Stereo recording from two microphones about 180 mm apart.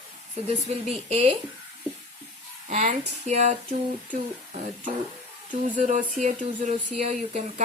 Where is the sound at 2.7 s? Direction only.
40° right (ahead or behind).